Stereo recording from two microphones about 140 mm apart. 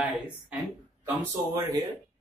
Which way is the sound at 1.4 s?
25° right (ahead or behind).